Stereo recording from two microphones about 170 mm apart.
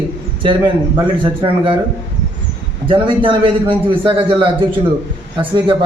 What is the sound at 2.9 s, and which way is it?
A man's voice, 30° right (ahead or behind).